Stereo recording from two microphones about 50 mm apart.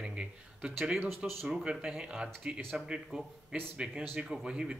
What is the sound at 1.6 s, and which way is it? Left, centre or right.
Speech, centre.